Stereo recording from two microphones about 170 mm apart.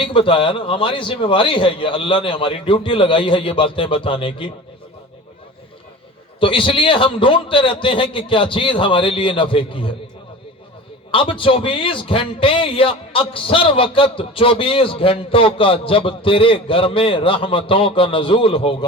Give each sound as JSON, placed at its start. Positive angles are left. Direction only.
{"t": 0.0, "sound": "a man's voice", "side_deg": 30}
{"t": 6.4, "sound": "a man's voice", "side_deg": 30}
{"t": 11.1, "sound": "a man's voice", "side_deg": 30}